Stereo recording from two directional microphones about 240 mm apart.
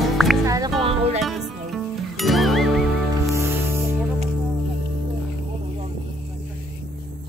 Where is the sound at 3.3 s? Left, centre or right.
Centre.